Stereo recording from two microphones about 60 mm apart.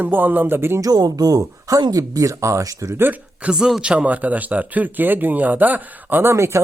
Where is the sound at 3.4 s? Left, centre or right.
Centre; by 6.3 s right.